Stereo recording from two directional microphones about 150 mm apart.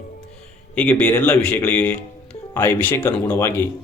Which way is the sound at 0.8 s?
10° left (ahead or behind).